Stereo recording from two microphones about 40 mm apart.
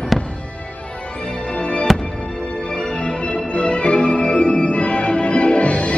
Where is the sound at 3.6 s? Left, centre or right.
Left.